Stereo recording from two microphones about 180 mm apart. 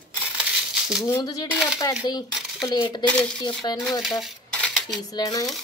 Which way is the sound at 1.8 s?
20° left (ahead or behind).